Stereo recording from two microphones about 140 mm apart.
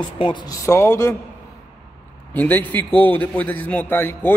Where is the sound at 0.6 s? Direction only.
20° left (ahead or behind).